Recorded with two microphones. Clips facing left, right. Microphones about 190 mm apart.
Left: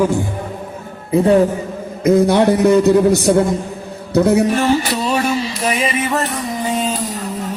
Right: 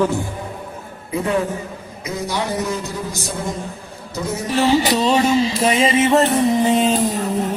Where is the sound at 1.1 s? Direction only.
35° left (ahead or behind).